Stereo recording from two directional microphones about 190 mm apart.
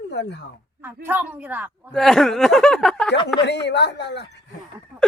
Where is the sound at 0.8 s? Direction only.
10° right (ahead or behind).